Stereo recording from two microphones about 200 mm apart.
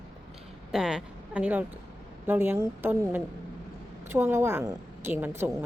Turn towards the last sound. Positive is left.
turn(degrees=-10)  # may be behind; listen again after turning